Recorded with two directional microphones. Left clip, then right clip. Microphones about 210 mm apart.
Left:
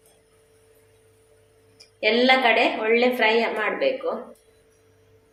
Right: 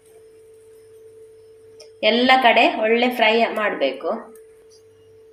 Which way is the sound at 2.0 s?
25° right (ahead or behind).